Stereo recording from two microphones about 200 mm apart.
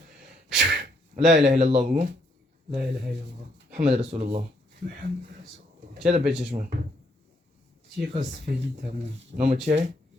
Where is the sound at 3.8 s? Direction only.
30° right (ahead or behind).